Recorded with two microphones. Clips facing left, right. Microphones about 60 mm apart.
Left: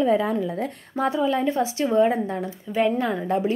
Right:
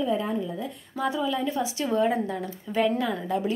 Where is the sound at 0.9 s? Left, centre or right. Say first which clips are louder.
Left 4 dB; left.